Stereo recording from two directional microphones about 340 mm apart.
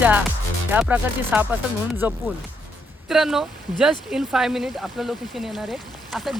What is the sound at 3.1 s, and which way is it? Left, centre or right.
Speech, centre.